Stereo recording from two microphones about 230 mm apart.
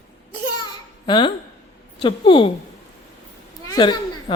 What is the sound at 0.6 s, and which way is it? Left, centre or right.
Babbling, centre.